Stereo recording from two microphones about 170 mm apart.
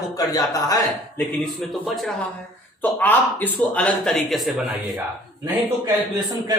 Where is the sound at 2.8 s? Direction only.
10° left (ahead or behind).